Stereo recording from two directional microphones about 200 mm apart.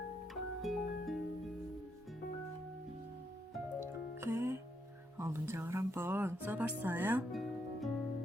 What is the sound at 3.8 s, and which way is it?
Music, 15° right (ahead or behind).